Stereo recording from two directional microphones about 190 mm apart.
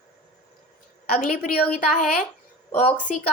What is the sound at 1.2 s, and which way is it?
A woman's voice, 40° left (ahead or behind).